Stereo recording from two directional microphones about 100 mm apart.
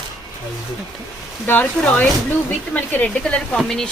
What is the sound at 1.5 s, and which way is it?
Speech, 15° left (ahead or behind).